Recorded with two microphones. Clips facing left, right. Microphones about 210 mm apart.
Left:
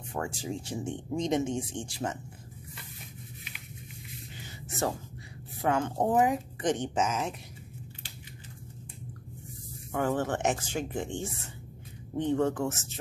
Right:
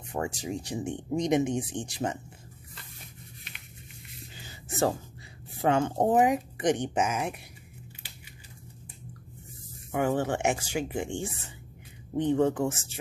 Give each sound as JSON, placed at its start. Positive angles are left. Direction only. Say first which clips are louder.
{"t": 0.1, "sound": "speech", "louder": "right 2 dB", "side_deg": -20}
{"t": 5.6, "sound": "speech", "louder": "right 3 dB", "side_deg": -25}
{"t": 9.9, "sound": "speech", "louder": "right 2 dB", "side_deg": -15}